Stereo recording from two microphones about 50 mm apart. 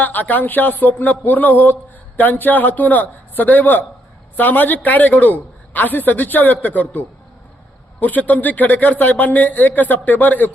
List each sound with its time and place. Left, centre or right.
0.0 s speech: left
8.0 s speech: left